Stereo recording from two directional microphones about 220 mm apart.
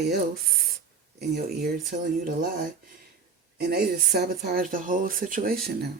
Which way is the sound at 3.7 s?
45° right (ahead or behind).